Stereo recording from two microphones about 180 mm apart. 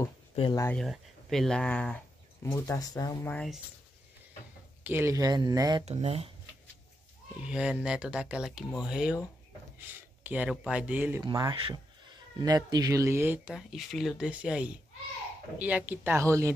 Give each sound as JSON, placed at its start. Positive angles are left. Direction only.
{"t": 0.6, "sound": "speech", "side_deg": 10}
{"t": 3.3, "sound": "speech", "side_deg": 5}
{"t": 4.8, "sound": "speech", "side_deg": -15}
{"t": 5.9, "sound": "speech", "side_deg": -35}
{"t": 7.4, "sound": "speech", "side_deg": -5}
{"t": 10.2, "sound": "speech", "side_deg": -10}
{"t": 11.1, "sound": "speech", "side_deg": -20}